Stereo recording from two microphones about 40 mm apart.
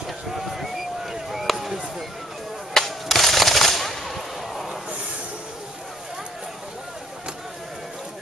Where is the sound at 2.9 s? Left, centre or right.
Centre.